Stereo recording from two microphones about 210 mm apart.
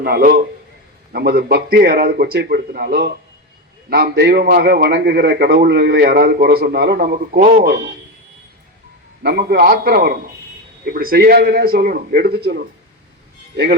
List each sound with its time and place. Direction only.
0.0 s a man's voice: 45° right (ahead or behind)
9.2 s a man's voice: 50° right (ahead or behind)